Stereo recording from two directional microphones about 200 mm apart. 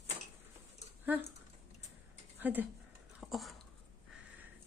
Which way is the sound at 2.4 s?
10° right (ahead or behind).